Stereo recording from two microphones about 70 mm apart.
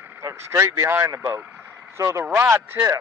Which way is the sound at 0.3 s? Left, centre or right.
Right.